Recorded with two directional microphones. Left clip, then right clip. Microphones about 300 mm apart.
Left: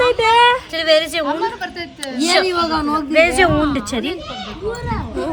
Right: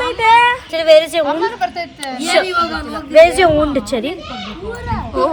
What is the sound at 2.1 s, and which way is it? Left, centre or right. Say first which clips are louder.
A woman's voice: right 1 dB; centre.